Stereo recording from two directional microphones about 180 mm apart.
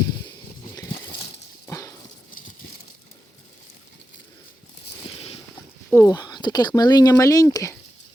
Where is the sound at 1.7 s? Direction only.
15° left (ahead or behind).